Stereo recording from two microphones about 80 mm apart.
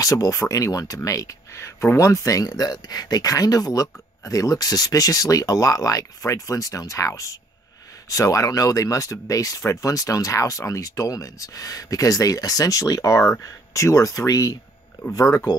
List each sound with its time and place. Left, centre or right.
0.0 s speech: left